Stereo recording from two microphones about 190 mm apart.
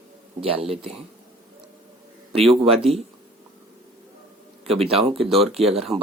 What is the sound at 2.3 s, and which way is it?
Speech, 30° right (ahead or behind).